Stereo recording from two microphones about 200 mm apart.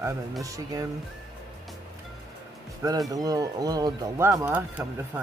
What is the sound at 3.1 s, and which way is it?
Speech, 15° right (ahead or behind).